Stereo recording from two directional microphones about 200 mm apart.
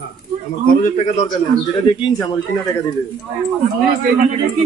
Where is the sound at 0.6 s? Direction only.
45° left (ahead or behind).